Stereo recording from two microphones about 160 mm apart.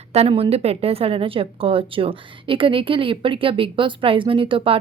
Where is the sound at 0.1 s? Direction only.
40° right (ahead or behind).